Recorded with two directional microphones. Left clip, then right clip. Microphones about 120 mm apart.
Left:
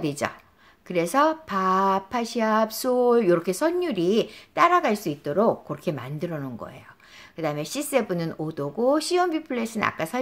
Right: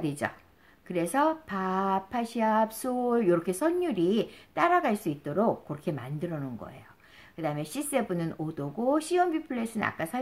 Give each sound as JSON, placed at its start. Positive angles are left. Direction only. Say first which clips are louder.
{"t": 0.0, "sound": "speech", "louder": "left 4 dB", "side_deg": 35}